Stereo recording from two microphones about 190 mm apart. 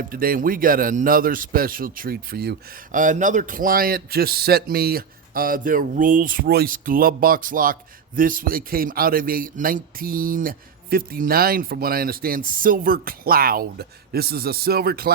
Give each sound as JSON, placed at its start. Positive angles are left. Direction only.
{"t": 0.1, "sound": "a man's voice", "side_deg": -50}